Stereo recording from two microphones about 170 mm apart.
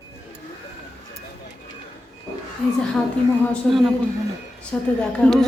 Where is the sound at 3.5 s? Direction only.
Centre (ahead or behind).